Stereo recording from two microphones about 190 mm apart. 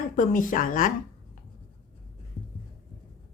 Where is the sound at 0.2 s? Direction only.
45° left (ahead or behind).